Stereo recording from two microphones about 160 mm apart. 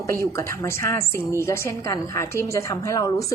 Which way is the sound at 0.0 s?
20° left (ahead or behind).